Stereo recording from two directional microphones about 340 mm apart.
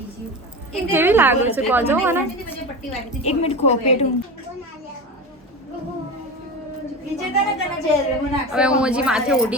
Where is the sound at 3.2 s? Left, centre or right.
Centre.